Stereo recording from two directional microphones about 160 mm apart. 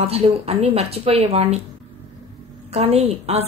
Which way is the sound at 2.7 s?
40° right (ahead or behind).